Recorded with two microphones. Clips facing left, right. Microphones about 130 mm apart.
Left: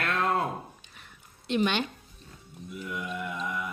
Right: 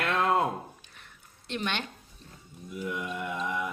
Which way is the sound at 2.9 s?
20° right (ahead or behind).